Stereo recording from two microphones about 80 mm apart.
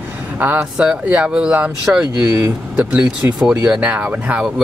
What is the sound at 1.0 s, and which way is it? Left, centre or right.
Speech, centre.